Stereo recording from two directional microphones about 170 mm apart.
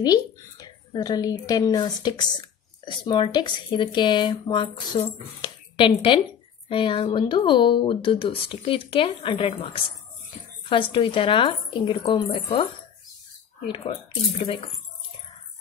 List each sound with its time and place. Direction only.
0.0 s a woman's voice: 25° left (ahead or behind)
10.7 s speech: 30° left (ahead or behind)
14.4 s speech: 30° left (ahead or behind)